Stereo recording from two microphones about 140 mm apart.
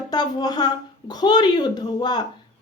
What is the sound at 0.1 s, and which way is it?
A woman's voice, 30° left (ahead or behind).